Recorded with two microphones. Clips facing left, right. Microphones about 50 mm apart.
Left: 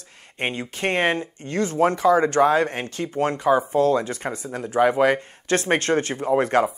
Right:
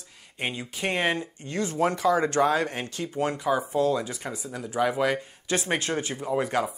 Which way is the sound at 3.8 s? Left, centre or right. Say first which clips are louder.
Left 5 dB; left.